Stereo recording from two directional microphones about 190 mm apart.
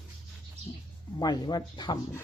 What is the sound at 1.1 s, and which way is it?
Speech, 20° left (ahead or behind).